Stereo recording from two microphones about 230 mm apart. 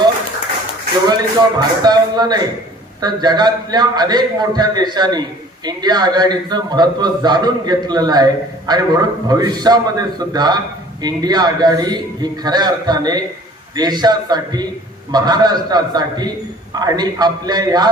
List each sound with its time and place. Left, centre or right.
1.0 s a man's voice: centre